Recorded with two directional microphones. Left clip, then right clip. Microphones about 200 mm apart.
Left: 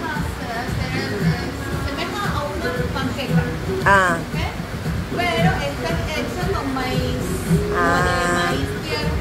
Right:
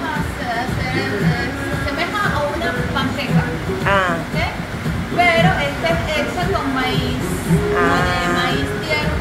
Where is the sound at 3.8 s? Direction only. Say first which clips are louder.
Left 2 dB; 20° left (ahead or behind).